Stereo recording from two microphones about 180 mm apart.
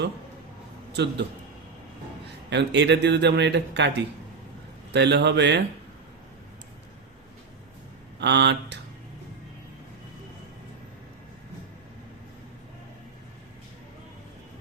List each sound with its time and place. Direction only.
0.9 s speech: 75° right (ahead or behind)
2.5 s speech: 75° right (ahead or behind)
4.9 s speech: 70° right (ahead or behind)
8.2 s speech: 70° right (ahead or behind)